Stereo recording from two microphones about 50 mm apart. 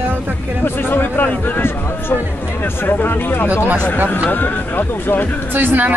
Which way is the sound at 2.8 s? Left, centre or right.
Left.